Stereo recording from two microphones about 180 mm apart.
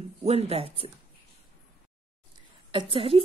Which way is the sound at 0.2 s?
35° right (ahead or behind).